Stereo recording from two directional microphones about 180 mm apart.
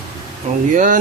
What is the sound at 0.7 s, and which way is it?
Speech, 45° right (ahead or behind).